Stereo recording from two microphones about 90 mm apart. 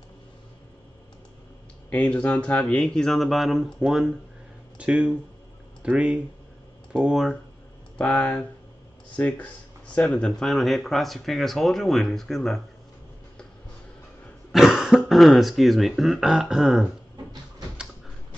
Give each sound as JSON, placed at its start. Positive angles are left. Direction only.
{"t": 1.9, "sound": "speech", "side_deg": 15}
{"t": 14.5, "sound": "speech", "side_deg": 0}